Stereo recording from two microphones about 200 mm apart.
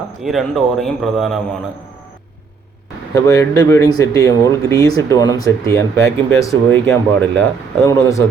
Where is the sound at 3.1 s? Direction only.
15° left (ahead or behind).